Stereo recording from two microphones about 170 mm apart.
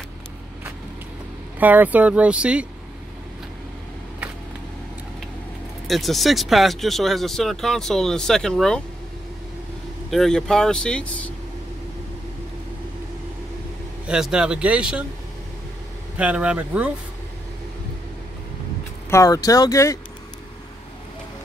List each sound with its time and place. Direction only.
1.6 s speech: 10° right (ahead or behind)
5.9 s speech: centre (ahead or behind)
10.1 s speech: 5° left (ahead or behind)
14.0 s speech: 5° right (ahead or behind)
16.2 s speech: 5° right (ahead or behind)
19.0 s speech: 20° left (ahead or behind)